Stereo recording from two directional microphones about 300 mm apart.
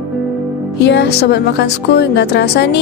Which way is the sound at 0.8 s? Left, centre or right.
Left.